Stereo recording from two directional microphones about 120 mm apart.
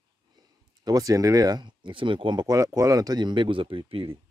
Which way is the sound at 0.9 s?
30° right (ahead or behind).